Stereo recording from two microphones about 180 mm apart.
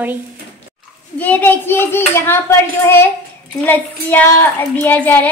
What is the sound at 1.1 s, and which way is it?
A child's voice, 10° left (ahead or behind).